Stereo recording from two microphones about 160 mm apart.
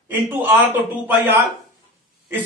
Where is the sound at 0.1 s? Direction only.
10° right (ahead or behind).